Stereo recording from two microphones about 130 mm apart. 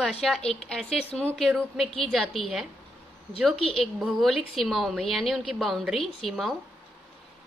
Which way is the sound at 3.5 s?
45° left (ahead or behind).